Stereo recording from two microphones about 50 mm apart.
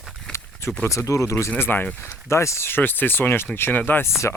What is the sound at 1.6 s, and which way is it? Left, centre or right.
Speech, left.